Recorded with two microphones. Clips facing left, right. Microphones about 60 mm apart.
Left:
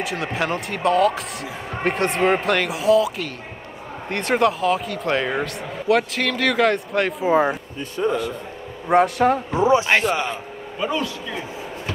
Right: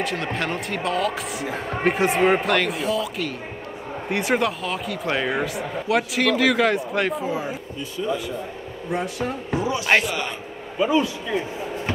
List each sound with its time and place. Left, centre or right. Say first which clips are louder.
0.0 s speech: left 1 dB; centre
8.0 s speech: left 4 dB; left
9.6 s a man's voice: left 3 dB; left
10.8 s a man's voice: right 4 dB; centre